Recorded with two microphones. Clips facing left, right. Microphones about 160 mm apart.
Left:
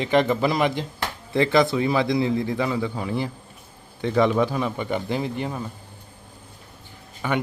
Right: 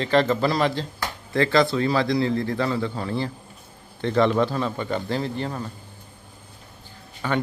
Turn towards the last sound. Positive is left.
turn(degrees=15)  # may be behind; listen again after turning